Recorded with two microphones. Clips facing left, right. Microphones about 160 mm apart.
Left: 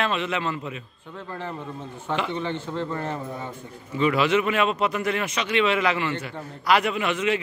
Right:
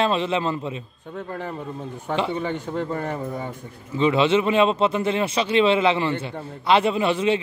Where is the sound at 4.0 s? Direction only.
25° right (ahead or behind).